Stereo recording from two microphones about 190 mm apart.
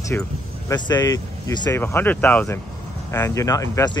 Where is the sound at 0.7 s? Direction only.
20° left (ahead or behind).